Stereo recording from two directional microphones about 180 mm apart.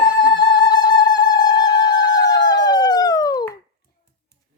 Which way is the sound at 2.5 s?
20° left (ahead or behind).